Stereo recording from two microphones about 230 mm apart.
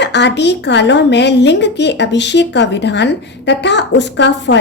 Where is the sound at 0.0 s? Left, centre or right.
Left.